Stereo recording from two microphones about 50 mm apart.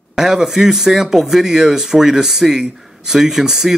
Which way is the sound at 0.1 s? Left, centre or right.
Centre.